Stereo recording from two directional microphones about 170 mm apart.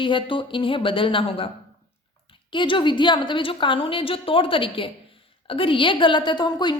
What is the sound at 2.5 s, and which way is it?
A woman's voice, 30° left (ahead or behind).